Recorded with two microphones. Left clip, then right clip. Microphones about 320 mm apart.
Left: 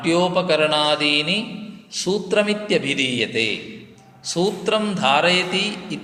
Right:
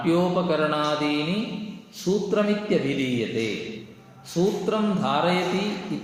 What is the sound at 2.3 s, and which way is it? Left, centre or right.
Speech, left.